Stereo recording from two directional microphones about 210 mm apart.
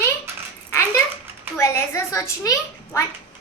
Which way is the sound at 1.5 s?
15° left (ahead or behind).